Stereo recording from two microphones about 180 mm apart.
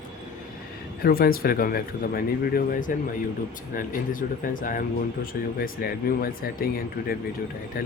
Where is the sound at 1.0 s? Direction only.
55° left (ahead or behind).